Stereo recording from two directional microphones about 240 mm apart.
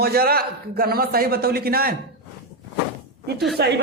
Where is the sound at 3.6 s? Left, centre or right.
Right.